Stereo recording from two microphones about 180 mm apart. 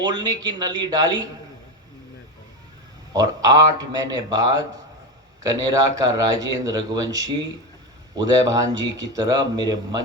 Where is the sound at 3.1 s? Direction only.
20° right (ahead or behind).